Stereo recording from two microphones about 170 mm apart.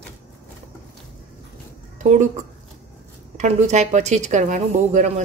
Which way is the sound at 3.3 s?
45° right (ahead or behind).